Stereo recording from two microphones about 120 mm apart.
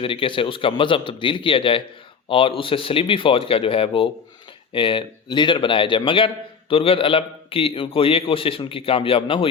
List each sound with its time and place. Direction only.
0.0 s a man's voice: 45° left (ahead or behind)